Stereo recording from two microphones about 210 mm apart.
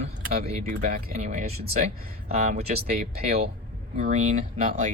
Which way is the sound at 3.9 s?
35° right (ahead or behind).